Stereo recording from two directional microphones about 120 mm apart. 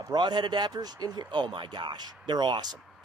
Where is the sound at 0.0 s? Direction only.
35° right (ahead or behind).